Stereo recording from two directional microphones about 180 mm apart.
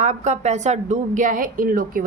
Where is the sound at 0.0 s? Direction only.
40° right (ahead or behind).